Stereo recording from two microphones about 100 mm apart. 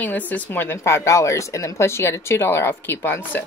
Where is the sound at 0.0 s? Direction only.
15° left (ahead or behind).